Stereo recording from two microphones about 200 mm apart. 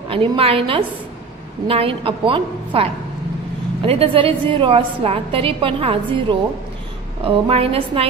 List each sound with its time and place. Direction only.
0.1 s a woman's voice: 30° right (ahead or behind)